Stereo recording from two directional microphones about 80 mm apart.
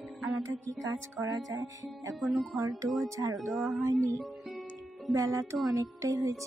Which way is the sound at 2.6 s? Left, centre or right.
Right.